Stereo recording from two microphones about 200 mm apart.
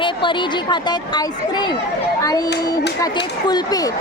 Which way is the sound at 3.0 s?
20° left (ahead or behind).